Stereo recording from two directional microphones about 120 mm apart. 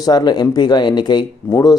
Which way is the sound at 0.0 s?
35° left (ahead or behind).